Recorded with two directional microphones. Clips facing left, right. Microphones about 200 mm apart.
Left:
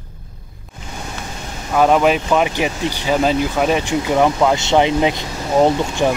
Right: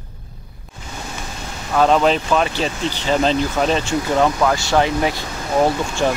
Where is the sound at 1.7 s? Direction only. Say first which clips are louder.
Left 1 dB; 10° left (ahead or behind).